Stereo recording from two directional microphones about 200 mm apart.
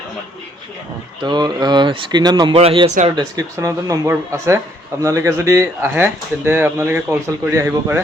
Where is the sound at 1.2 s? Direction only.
20° right (ahead or behind).